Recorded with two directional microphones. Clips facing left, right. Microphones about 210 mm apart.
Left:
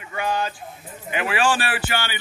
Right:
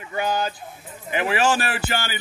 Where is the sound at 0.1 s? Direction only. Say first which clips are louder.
Right 1 dB; 40° right (ahead or behind).